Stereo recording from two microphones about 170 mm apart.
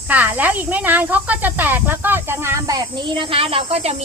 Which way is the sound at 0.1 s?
10° right (ahead or behind).